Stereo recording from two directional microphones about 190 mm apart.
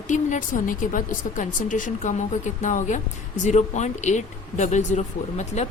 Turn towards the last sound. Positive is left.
turn(degrees=35)  # may be behind; listen again after turning